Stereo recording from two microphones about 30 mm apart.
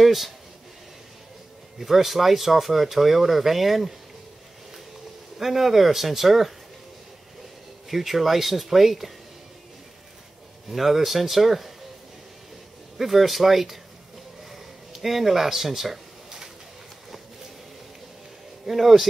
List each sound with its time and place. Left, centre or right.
0.0 s speech: centre
1.8 s speech: centre
5.4 s speech: centre
7.9 s speech: centre
10.7 s speech: centre
12.9 s speech: centre
14.5 s a sound: centre
18.7 s speech: centre